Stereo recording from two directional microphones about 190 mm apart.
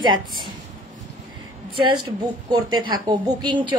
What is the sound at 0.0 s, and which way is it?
Speech, 25° right (ahead or behind).